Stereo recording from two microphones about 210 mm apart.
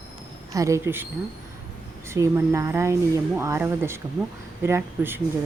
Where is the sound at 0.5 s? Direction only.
15° right (ahead or behind).